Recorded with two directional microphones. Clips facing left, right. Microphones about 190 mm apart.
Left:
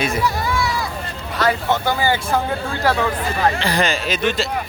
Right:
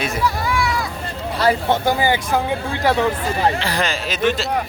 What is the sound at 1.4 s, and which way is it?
Speech, 30° right (ahead or behind).